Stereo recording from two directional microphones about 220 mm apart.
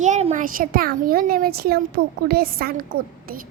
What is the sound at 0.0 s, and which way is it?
A woman's voice, 30° right (ahead or behind).